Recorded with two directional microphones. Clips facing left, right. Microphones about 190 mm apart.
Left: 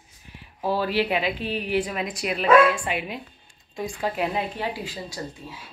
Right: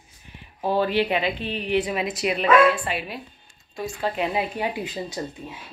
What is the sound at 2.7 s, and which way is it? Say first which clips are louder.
Speech: even; 15° left (ahead or behind).